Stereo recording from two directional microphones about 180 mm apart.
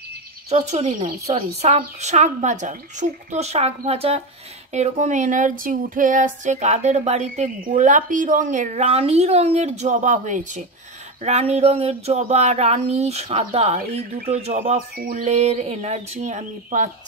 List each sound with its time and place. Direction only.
0.5 s a woman's voice: 40° right (ahead or behind)